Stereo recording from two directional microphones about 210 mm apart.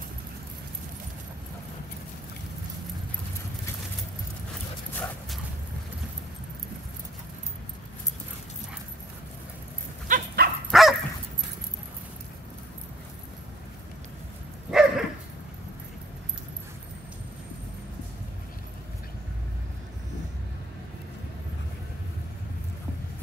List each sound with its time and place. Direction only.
4.9 s dog: 5° left (ahead or behind)
10.0 s dog: 45° right (ahead or behind)
10.7 s dog: centre (ahead or behind)
14.7 s dog: 5° right (ahead or behind)